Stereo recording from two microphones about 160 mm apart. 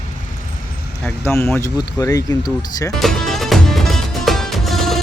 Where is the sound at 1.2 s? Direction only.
15° left (ahead or behind).